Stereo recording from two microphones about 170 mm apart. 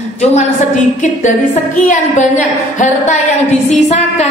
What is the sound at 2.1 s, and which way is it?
A woman's voice, 45° left (ahead or behind).